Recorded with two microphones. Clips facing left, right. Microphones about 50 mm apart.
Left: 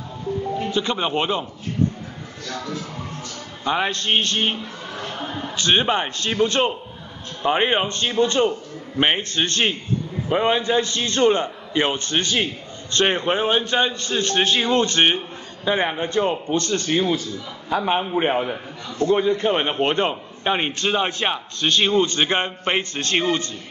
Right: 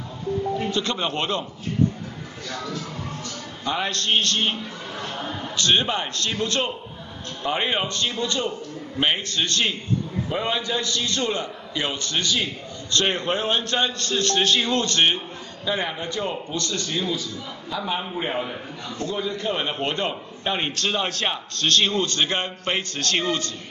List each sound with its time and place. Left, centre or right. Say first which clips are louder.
0.7 s a man's voice: left 2 dB; centre
2.4 s speech: left 2 dB; centre
3.6 s a man's voice: left 3 dB; centre